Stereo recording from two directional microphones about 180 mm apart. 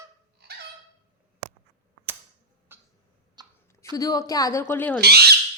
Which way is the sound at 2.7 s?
10° right (ahead or behind).